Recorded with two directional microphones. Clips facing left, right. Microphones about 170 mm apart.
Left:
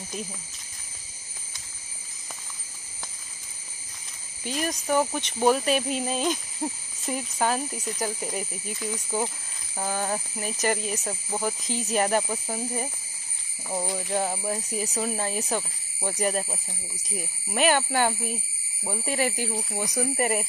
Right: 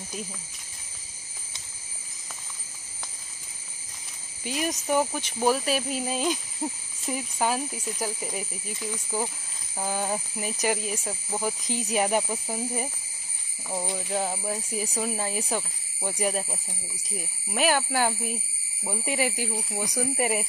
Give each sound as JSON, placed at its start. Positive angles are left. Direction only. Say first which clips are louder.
{"t": 4.5, "sound": "speech", "louder": "even", "side_deg": -15}
{"t": 5.0, "sound": "speech", "louder": "left 2 dB", "side_deg": 0}
{"t": 11.6, "sound": "speech", "louder": "left 1 dB", "side_deg": -15}
{"t": 14.0, "sound": "speech", "louder": "left 1 dB", "side_deg": 0}